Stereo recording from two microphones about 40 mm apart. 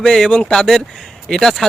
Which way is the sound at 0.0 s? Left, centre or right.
Centre.